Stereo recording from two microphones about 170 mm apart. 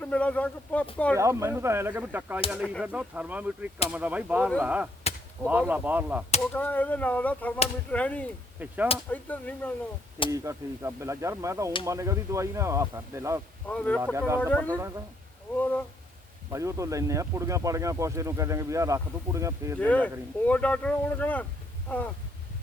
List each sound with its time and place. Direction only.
0.0 s speech: 10° left (ahead or behind)
1.1 s speech: 15° right (ahead or behind)
6.5 s speech: 10° left (ahead or behind)
8.5 s whip: 10° right (ahead or behind)
9.0 s speech: 10° left (ahead or behind)
10.3 s speech: 15° right (ahead or behind)
13.7 s speech: 10° left (ahead or behind)
14.0 s speech: 15° right (ahead or behind)
14.4 s speech: 10° left (ahead or behind)
16.5 s speech: 15° right (ahead or behind)
19.8 s speech: 10° left (ahead or behind)